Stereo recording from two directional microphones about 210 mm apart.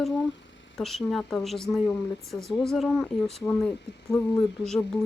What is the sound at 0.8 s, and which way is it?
Speech, centre (ahead or behind).